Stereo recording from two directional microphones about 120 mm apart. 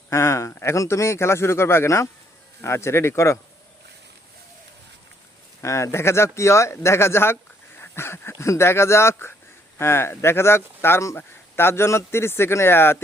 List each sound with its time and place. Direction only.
0.1 s speech: 20° left (ahead or behind)
5.6 s speech: 25° left (ahead or behind)